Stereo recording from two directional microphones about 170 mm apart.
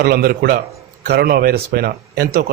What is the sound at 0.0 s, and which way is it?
A man's voice, 65° right (ahead or behind).